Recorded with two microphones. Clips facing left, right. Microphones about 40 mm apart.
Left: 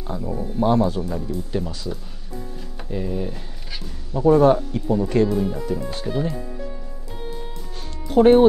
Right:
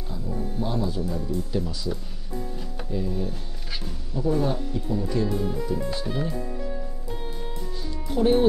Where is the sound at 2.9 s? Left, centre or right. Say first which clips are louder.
Left 3 dB; left.